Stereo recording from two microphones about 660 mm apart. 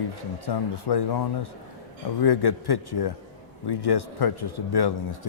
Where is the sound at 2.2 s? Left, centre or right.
Left.